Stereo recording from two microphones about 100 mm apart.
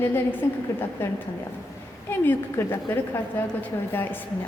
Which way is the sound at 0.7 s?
30° left (ahead or behind).